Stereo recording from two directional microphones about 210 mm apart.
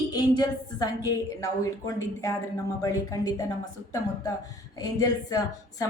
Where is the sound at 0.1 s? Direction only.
20° left (ahead or behind).